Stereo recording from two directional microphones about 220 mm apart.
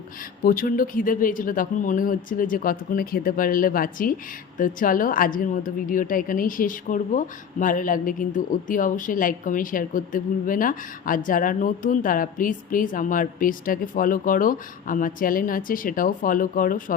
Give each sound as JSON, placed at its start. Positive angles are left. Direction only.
{"t": 0.4, "sound": "a woman's voice", "side_deg": 40}